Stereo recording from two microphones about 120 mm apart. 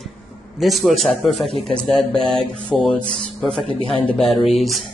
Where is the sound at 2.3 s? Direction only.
50° right (ahead or behind).